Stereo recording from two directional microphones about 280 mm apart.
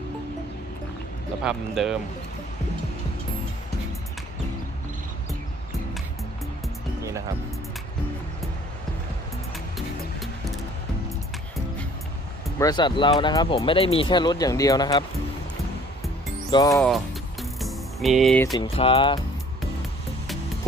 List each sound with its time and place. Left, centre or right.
1.5 s speech: centre
9.7 s music: centre
12.5 s speech: centre
16.5 s speech: centre
17.4 s music: centre
18.5 s speech: centre